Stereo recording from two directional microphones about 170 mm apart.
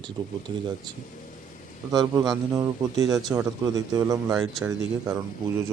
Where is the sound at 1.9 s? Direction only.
20° right (ahead or behind).